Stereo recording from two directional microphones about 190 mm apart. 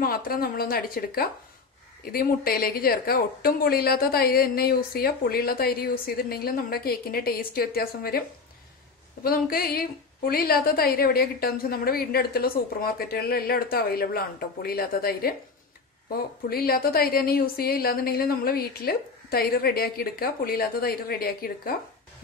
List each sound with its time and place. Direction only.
0.0 s a woman's voice: 50° left (ahead or behind)
9.2 s a woman's voice: 50° left (ahead or behind)